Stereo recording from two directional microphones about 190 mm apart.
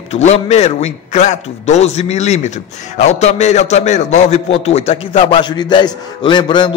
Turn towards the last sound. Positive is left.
turn(degrees=25)  # may be behind; listen again after turning